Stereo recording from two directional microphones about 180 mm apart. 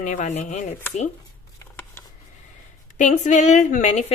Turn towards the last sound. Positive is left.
turn(degrees=40)  # may be behind; listen again after turning